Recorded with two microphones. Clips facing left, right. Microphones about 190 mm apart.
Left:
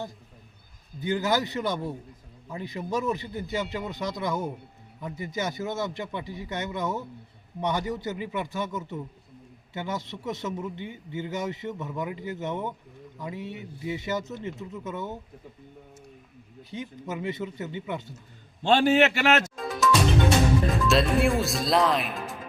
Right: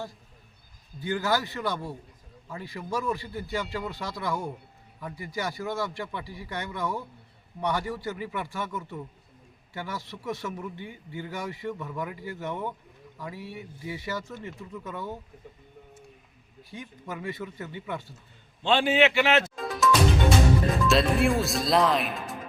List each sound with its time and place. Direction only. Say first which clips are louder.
0.9 s a man's voice: left 2 dB; 20° left (ahead or behind)
16.7 s a man's voice: left 4 dB; 20° left (ahead or behind)
18.6 s a man's voice: left 2 dB; 40° left (ahead or behind)
19.5 s music: even; centre (ahead or behind)
20.7 s speech: even; centre (ahead or behind)